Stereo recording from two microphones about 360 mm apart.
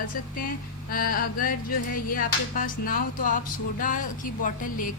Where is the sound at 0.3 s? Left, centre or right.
Left.